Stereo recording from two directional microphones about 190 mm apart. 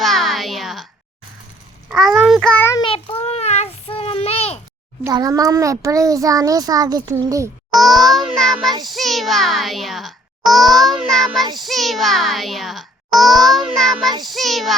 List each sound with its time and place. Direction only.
0.0 s a sound: centre (ahead or behind)
1.9 s child singing: centre (ahead or behind)
2.8 s child singing: 30° left (ahead or behind)
5.0 s a child's voice: 20° right (ahead or behind)
7.7 s a sound: centre (ahead or behind)
8.8 s a child's voice: centre (ahead or behind)